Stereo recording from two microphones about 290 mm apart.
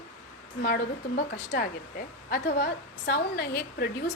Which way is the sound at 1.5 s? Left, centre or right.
Left.